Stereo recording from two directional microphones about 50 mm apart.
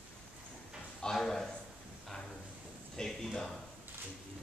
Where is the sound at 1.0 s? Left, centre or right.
Centre.